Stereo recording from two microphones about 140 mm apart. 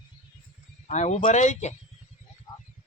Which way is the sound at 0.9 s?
55° left (ahead or behind).